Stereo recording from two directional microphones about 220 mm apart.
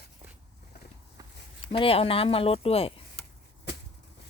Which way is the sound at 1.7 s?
25° left (ahead or behind).